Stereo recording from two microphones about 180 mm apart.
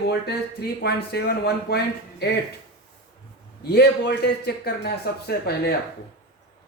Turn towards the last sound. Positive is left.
turn(degrees=60)  # may be behind; listen again after turning